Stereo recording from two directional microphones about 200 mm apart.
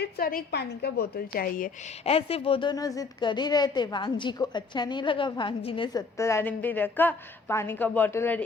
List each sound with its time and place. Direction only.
0.0 s a woman's voice: 45° left (ahead or behind)
2.0 s a woman's voice: 30° left (ahead or behind); by 8.4 s 10° left (ahead or behind)